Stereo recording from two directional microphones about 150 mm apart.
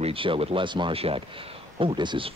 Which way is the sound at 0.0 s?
35° right (ahead or behind).